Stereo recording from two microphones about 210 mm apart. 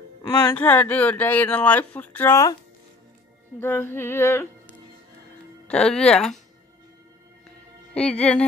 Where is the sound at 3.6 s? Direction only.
10° left (ahead or behind).